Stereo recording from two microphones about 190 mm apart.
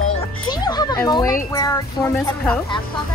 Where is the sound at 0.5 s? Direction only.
20° left (ahead or behind).